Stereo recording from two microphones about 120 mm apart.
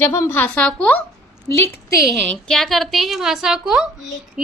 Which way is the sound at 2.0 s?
5° left (ahead or behind).